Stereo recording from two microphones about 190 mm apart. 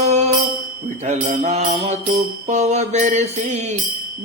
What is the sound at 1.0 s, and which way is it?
Music, 40° right (ahead or behind).